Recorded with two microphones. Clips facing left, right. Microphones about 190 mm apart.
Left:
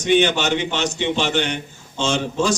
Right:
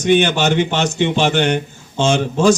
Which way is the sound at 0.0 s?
50° right (ahead or behind).